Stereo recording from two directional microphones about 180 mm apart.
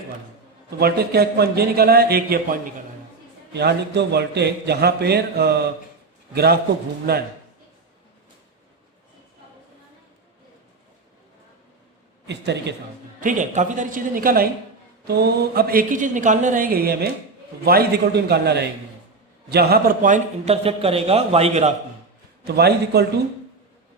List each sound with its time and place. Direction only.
0.8 s a man's voice: 60° right (ahead or behind)
12.3 s speech: 70° right (ahead or behind)
13.1 s speech: 45° right (ahead or behind)
15.0 s a man's voice: 60° right (ahead or behind); by 21.7 s 35° right (ahead or behind)
22.4 s a man's voice: 65° right (ahead or behind)